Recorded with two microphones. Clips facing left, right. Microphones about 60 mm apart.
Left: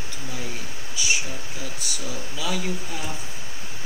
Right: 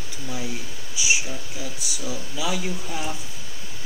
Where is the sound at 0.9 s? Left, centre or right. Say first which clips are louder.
Right 2 dB; centre.